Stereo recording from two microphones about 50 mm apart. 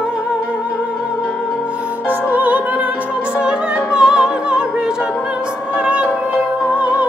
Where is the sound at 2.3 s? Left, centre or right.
Right.